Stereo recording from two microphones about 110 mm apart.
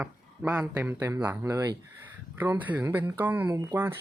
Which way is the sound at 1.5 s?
30° right (ahead or behind).